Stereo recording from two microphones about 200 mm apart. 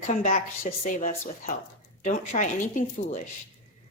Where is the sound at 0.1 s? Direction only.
40° left (ahead or behind).